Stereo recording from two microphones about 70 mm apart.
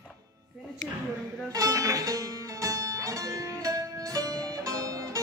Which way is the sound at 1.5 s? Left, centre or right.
Right.